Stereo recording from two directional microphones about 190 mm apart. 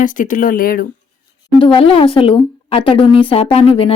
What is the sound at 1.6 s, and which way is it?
Speech, 30° left (ahead or behind).